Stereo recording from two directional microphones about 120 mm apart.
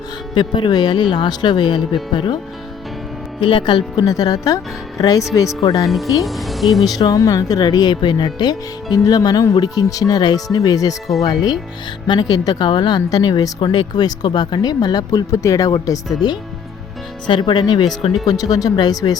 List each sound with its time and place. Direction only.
0.3 s speech: 40° left (ahead or behind)
3.4 s speech: 40° left (ahead or behind)
3.9 s speech: 30° left (ahead or behind)
6.2 s speech: centre (ahead or behind)
6.9 s speech: 30° left (ahead or behind)